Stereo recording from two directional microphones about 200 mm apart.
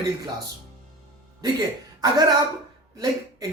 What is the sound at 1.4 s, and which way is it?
A man's voice, 20° right (ahead or behind).